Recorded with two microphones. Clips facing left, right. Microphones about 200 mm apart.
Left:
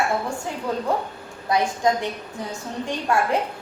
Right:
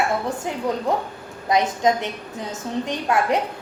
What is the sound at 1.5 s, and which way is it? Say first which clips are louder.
A woman's voice: right 2 dB; 20° right (ahead or behind).